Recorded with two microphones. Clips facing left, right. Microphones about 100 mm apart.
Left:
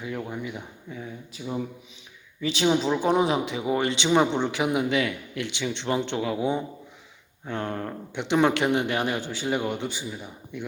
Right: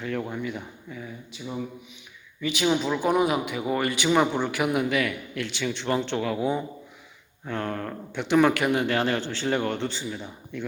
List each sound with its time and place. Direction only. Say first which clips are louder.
0.3 s speech: right 2 dB; 15° left (ahead or behind)
0.9 s speech: left 1 dB; 30° left (ahead or behind)
2.4 s speech: left 1 dB; 30° left (ahead or behind); by 10.7 s 15° left (ahead or behind)